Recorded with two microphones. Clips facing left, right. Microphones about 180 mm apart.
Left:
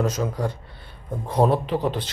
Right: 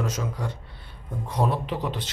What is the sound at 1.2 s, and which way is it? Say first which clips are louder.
Speech: left 6 dB; 35° left (ahead or behind).